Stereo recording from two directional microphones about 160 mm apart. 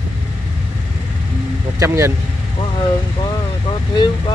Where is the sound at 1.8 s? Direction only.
20° right (ahead or behind).